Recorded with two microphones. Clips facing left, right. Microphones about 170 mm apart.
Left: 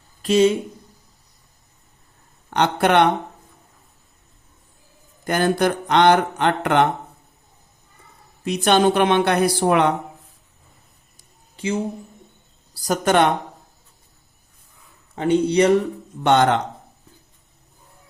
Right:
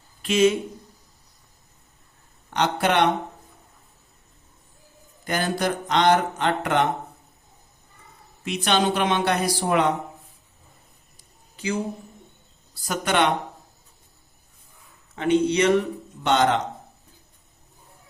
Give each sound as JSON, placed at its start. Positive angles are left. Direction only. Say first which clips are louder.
{"t": 0.2, "sound": "speech", "louder": "left 3 dB", "side_deg": 35}
{"t": 2.5, "sound": "speech", "louder": "left 4 dB", "side_deg": 55}
{"t": 5.2, "sound": "speech", "louder": "left 6 dB", "side_deg": 50}
{"t": 8.4, "sound": "speech", "louder": "left 6 dB", "side_deg": 45}
{"t": 11.5, "sound": "a woman's voice", "louder": "left 3 dB", "side_deg": 25}
{"t": 12.9, "sound": "speech", "louder": "left 5 dB", "side_deg": 45}
{"t": 15.1, "sound": "speech", "louder": "left 3 dB", "side_deg": 30}
{"t": 16.2, "sound": "speech", "louder": "left 4 dB", "side_deg": 55}